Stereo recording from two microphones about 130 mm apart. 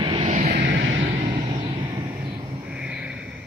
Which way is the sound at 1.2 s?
45° right (ahead or behind).